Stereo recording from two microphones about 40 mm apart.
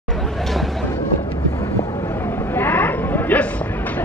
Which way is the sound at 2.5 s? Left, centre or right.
Left.